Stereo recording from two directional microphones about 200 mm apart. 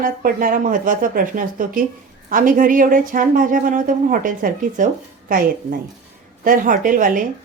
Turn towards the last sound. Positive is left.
turn(degrees=-40)  # may be behind; listen again after turning